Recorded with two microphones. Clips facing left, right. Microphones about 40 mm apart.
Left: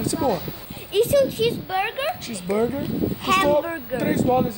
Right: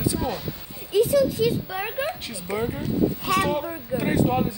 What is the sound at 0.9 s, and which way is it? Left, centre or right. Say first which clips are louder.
Speech: left 1 dB; left.